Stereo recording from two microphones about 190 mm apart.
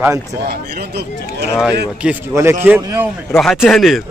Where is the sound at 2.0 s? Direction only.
15° right (ahead or behind).